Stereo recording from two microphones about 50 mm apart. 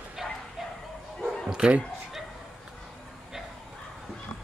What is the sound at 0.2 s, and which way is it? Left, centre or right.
Bow-wow, centre.